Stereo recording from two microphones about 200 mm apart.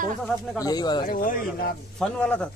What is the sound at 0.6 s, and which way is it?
Speech, 20° left (ahead or behind).